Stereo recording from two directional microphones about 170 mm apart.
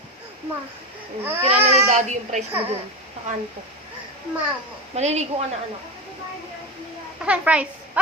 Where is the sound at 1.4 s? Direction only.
40° right (ahead or behind).